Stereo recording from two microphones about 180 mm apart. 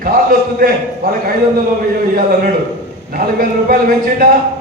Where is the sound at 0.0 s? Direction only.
50° right (ahead or behind).